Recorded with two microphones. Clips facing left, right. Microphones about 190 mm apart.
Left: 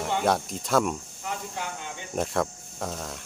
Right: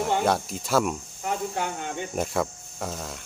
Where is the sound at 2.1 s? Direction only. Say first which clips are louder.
Left 2 dB; 5° right (ahead or behind).